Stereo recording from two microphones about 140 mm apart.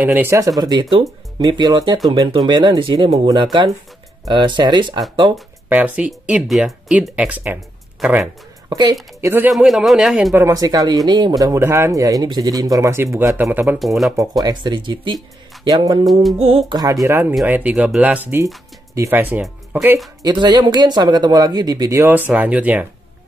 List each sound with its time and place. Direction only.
0.0 s speech: 15° right (ahead or behind); by 5.0 s 30° right (ahead or behind)
5.7 s speech: 10° right (ahead or behind)
8.6 s speech: 30° right (ahead or behind)
9.2 s speech: 15° right (ahead or behind)
9.5 s speech: centre (ahead or behind)
10.3 s speech: 25° right (ahead or behind)
13.7 s speech: centre (ahead or behind)
14.4 s speech: 30° right (ahead or behind)
16.1 s speech: centre (ahead or behind)
16.3 s speech: 45° right (ahead or behind)
16.7 s speech: 25° right (ahead or behind)
20.2 s speech: 30° right (ahead or behind); by 22.8 s 10° right (ahead or behind)